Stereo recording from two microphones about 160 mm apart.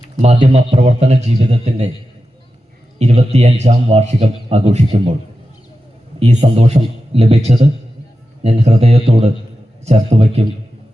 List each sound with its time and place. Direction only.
0.2 s a man's voice: 40° right (ahead or behind)
3.0 s a man's voice: 40° right (ahead or behind)
6.1 s a man's voice: 45° right (ahead or behind)